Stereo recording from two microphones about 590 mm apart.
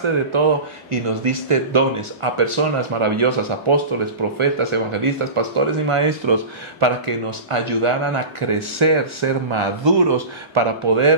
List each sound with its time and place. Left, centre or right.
0.9 s speech: right